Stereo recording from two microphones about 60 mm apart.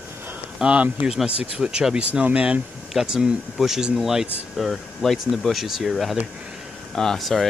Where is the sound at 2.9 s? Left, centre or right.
Centre.